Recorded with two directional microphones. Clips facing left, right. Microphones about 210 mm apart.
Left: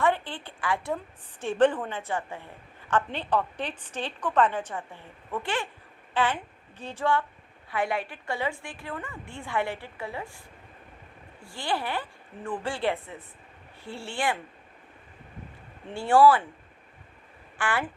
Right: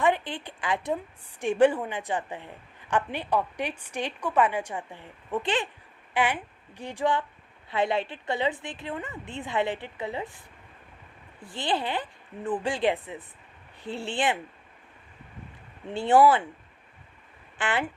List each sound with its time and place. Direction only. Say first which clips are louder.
0.0 s a sound: right 1 dB; 15° right (ahead or behind)
1.4 s a woman's voice: right 1 dB; 10° right (ahead or behind)
11.4 s a woman's voice: right 2 dB; 20° right (ahead or behind)
15.9 s a woman's voice: even; 20° right (ahead or behind)
17.6 s a woman's voice: right 1 dB; 20° right (ahead or behind)